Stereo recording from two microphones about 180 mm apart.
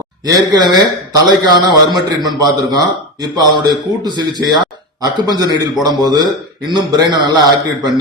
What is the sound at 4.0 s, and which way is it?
A man's voice, 25° right (ahead or behind).